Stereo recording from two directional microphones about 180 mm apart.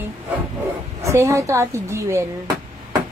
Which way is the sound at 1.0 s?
15° right (ahead or behind).